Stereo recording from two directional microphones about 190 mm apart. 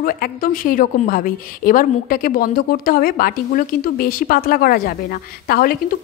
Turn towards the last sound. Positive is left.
turn(degrees=50)  # may be behind; listen again after turning